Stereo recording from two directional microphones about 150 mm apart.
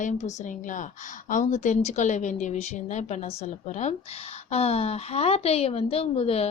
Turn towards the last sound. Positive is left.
turn(degrees=40)  # may be behind; listen again after turning